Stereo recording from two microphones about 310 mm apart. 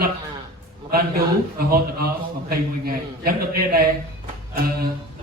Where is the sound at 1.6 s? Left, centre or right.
Right.